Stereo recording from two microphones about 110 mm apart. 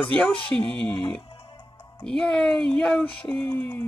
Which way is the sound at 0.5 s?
10° left (ahead or behind).